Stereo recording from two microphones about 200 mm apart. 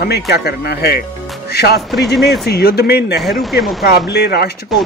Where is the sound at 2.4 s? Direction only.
50° left (ahead or behind).